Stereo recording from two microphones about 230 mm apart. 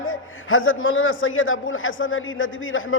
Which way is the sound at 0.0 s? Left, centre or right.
Left.